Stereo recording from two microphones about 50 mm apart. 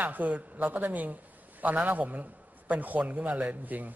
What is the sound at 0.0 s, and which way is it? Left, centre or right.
A man's voice, right.